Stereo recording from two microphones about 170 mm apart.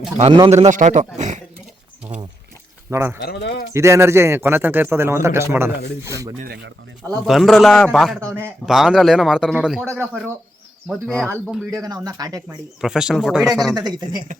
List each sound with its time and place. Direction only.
0.2 s a man's voice: 30° right (ahead or behind)
2.1 s speech: 25° right (ahead or behind)
2.9 s speech: 15° right (ahead or behind)
3.2 s speech: 90° left
3.7 s speech: 15° right (ahead or behind)
7.3 s a man's voice: centre (ahead or behind)
8.2 s speech: 15° right (ahead or behind)
8.6 s a man's voice: centre (ahead or behind)
9.8 s speech: 15° right (ahead or behind)
10.8 s a man's voice: 5° left (ahead or behind)
11.8 s speech: 20° right (ahead or behind)
12.8 s a man's voice: 5° right (ahead or behind)
13.7 s speech: 25° right (ahead or behind)